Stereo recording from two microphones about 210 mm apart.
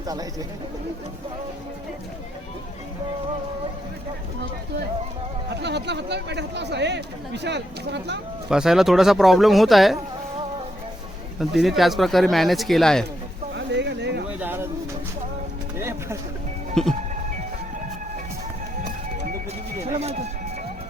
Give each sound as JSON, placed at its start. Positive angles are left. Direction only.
{"t": 0.1, "sound": "speech", "side_deg": -15}
{"t": 5.5, "sound": "speech", "side_deg": -55}
{"t": 8.4, "sound": "speech", "side_deg": -5}
{"t": 11.3, "sound": "speech", "side_deg": 0}
{"t": 13.5, "sound": "a sound", "side_deg": -55}
{"t": 14.3, "sound": "a sound", "side_deg": -10}
{"t": 15.8, "sound": "a sound", "side_deg": -10}
{"t": 16.8, "sound": "speech", "side_deg": 0}
{"t": 20.0, "sound": "music", "side_deg": -30}